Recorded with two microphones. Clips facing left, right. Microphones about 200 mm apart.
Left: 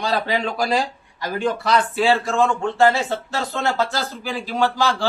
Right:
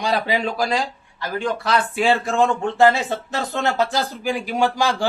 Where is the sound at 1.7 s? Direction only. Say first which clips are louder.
Even; 15° right (ahead or behind).